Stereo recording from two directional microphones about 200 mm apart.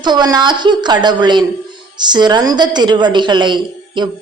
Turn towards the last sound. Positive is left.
turn(degrees=-25)  # may be behind; listen again after turning